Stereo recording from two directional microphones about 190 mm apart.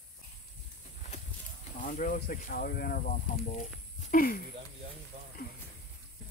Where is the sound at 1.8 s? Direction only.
45° left (ahead or behind).